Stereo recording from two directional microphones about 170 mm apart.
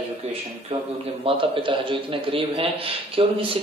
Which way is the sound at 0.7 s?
35° right (ahead or behind).